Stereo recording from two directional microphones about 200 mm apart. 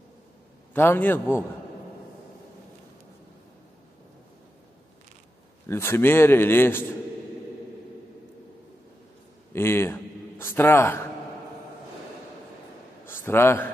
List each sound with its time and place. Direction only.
0.7 s speech: 10° left (ahead or behind)
5.7 s speech: 10° left (ahead or behind)
9.5 s a man's voice: 10° left (ahead or behind)
13.0 s a man's voice: 10° left (ahead or behind)